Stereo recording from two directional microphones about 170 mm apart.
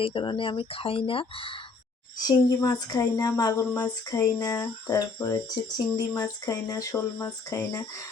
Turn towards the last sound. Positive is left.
turn(degrees=20)  # may be behind; listen again after turning